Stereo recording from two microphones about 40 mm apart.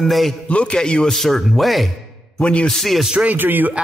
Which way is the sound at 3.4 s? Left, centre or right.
Right.